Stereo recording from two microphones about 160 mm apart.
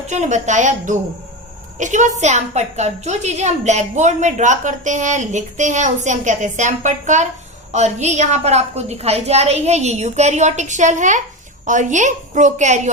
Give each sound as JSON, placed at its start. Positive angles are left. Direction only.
{"t": 0.1, "sound": "a woman's voice", "side_deg": -45}